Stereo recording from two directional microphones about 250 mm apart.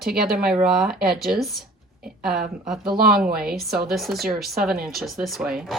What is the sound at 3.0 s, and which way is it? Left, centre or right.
Speech, right.